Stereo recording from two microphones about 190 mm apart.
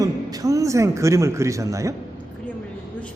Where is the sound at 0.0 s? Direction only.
20° right (ahead or behind).